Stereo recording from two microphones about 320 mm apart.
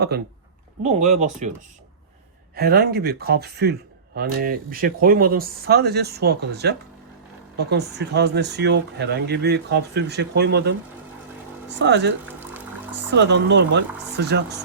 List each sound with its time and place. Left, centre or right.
0.8 s speech: right
2.6 s speech: right